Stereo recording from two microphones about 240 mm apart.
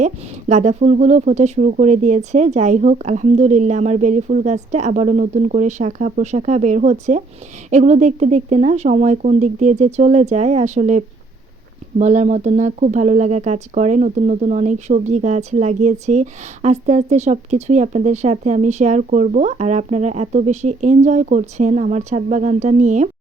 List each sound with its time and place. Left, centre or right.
0.0 s speech: right